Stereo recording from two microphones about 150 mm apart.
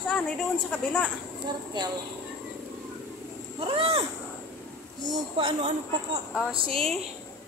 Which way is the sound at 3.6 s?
40° right (ahead or behind).